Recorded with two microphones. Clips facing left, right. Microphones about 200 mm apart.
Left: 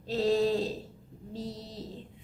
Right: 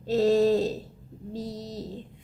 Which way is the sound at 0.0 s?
45° right (ahead or behind).